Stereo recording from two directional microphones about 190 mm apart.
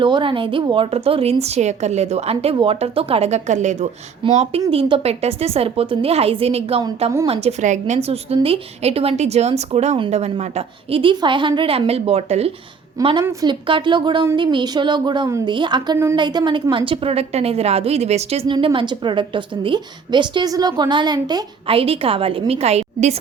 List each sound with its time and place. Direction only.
0.0 s a woman's voice: 25° right (ahead or behind)